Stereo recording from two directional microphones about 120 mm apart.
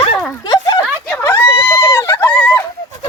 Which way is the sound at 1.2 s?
25° left (ahead or behind).